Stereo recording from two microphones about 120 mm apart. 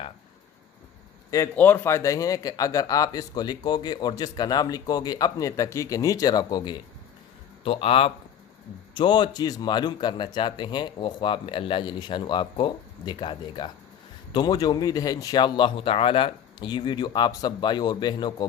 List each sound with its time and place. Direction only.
1.5 s speech: 15° left (ahead or behind); by 6.7 s 35° left (ahead or behind)
7.6 s a man's voice: 50° left (ahead or behind)
9.0 s speech: 40° left (ahead or behind)